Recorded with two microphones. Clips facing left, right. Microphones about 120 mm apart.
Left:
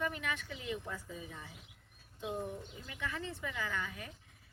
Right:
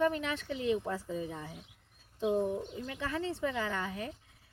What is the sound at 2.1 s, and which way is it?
Speech, 90° right.